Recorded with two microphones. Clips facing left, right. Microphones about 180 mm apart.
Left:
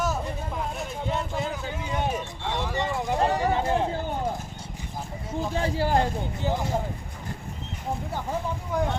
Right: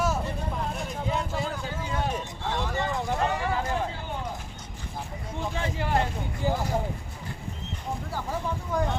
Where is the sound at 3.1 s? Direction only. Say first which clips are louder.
Left 6 dB; 35° left (ahead or behind).